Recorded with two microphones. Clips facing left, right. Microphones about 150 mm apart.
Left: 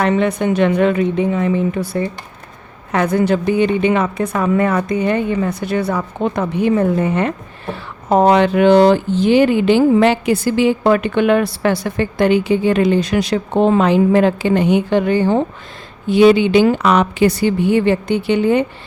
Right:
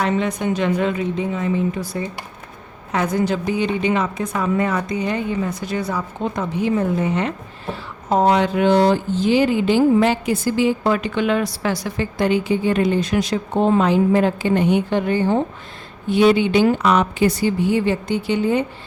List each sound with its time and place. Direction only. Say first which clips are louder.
0.0 s a woman's voice: left 5 dB; 60° left (ahead or behind)